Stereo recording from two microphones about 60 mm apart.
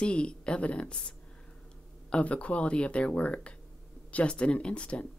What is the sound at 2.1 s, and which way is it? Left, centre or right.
Speech, left.